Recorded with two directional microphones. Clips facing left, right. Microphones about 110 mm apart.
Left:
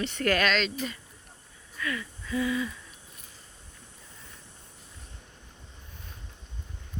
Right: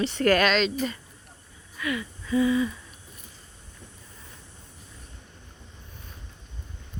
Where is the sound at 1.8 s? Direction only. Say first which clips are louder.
Right 4 dB; 10° right (ahead or behind).